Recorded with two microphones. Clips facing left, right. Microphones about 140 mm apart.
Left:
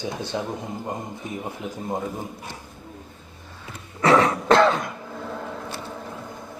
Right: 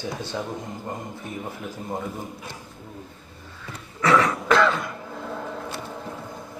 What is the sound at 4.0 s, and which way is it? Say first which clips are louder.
Music: left 2 dB; 30° left (ahead or behind).